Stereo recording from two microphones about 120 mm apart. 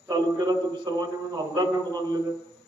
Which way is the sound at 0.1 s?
35° right (ahead or behind).